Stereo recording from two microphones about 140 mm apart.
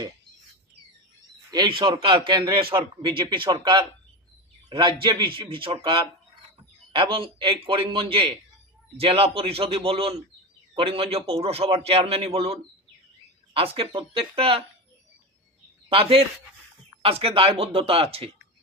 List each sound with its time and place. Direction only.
1.5 s speech: 30° right (ahead or behind)
6.9 s a man's voice: 40° right (ahead or behind)
15.9 s a man's voice: 40° right (ahead or behind)